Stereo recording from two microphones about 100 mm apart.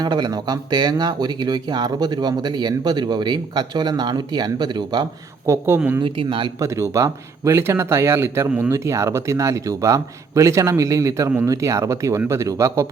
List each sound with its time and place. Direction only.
0.0 s speech: 45° right (ahead or behind)
5.5 s speech: 25° right (ahead or behind)
6.0 s speech: 55° right (ahead or behind)
6.6 s a man's voice: 30° right (ahead or behind)